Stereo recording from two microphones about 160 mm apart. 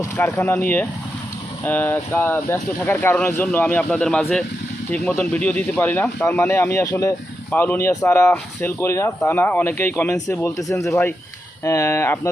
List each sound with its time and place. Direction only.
0.0 s speech: 15° left (ahead or behind)